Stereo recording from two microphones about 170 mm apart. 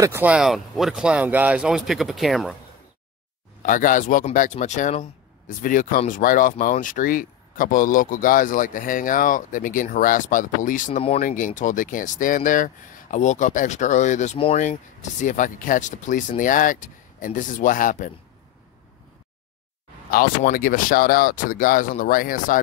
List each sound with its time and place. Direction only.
0.0 s speech: 10° right (ahead or behind)
3.6 s speech: 50° left (ahead or behind)
20.1 s speech: 60° left (ahead or behind)